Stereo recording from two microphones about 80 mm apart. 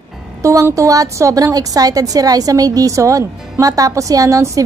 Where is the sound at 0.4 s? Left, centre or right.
Right.